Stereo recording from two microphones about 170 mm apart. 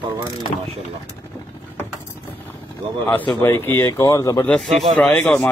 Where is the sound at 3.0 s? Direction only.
10° left (ahead or behind).